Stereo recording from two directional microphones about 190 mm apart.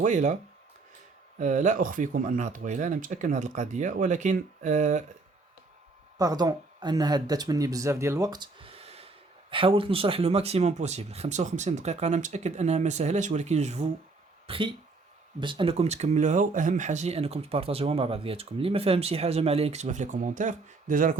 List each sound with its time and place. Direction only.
0.0 s speech: 40° right (ahead or behind)
1.4 s speech: 40° right (ahead or behind)
6.1 s speech: 20° right (ahead or behind); by 21.2 s 45° right (ahead or behind)